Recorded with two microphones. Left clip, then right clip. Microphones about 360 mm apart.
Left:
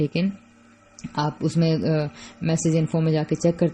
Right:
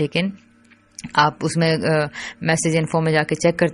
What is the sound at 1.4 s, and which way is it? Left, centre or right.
Speech, right.